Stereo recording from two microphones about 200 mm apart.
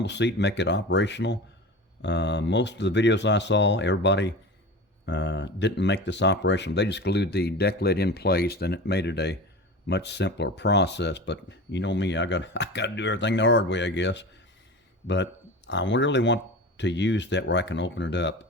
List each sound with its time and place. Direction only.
0.0 s speech: 60° left (ahead or behind)